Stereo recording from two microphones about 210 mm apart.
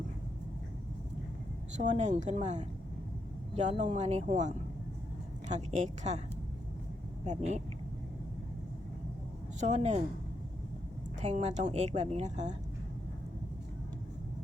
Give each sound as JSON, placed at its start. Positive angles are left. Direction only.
{"t": 1.9, "sound": "a woman's voice", "side_deg": -35}
{"t": 7.3, "sound": "a woman's voice", "side_deg": -35}
{"t": 9.6, "sound": "a woman's voice", "side_deg": -35}
{"t": 11.2, "sound": "a woman's voice", "side_deg": -35}